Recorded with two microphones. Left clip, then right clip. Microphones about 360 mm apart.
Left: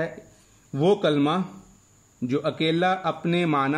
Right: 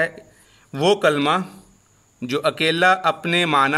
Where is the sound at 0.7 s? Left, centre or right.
Right.